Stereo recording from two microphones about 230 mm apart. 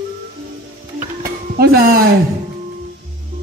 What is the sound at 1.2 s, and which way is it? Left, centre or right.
Music, right.